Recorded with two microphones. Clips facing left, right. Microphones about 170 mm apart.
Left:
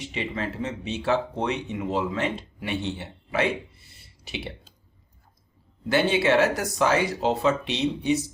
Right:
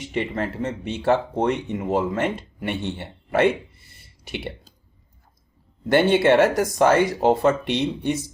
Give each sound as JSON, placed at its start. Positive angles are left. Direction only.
{"t": 0.1, "sound": "speech", "side_deg": -55}
{"t": 5.9, "sound": "speech", "side_deg": -55}